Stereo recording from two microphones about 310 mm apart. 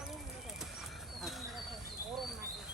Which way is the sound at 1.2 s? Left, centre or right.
Centre.